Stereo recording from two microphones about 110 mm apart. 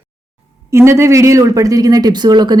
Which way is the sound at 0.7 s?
25° right (ahead or behind).